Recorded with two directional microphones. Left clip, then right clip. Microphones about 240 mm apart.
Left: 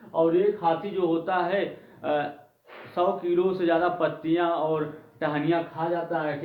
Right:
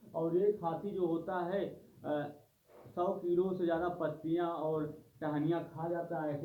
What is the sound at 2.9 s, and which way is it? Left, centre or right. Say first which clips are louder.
Speech: left 9 dB; left.